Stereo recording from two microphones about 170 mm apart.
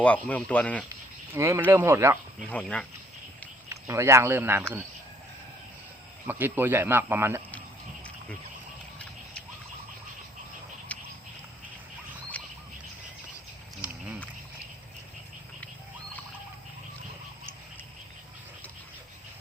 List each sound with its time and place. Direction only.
0.0 s speech: 10° left (ahead or behind)
1.3 s speech: 15° right (ahead or behind)
2.5 s speech: 5° left (ahead or behind)
3.7 s speech: 15° right (ahead or behind)
6.2 s speech: 10° right (ahead or behind)
10.9 s a sound: 10° left (ahead or behind)
12.4 s bird: 10° left (ahead or behind)